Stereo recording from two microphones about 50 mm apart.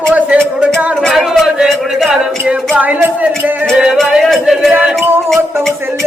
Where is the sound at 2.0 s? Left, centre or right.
Centre.